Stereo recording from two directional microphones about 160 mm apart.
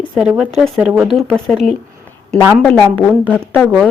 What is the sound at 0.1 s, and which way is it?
Speech, 5° right (ahead or behind).